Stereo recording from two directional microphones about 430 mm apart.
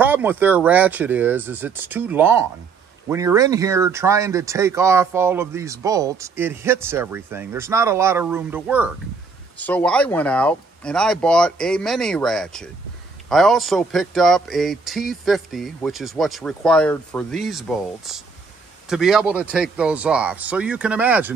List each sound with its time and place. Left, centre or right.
0.0 s speech: centre